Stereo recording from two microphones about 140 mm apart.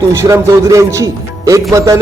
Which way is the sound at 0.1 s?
20° right (ahead or behind).